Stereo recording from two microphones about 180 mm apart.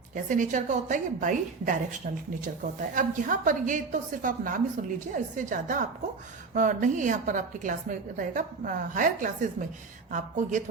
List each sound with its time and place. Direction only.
0.1 s a woman's voice: 45° right (ahead or behind)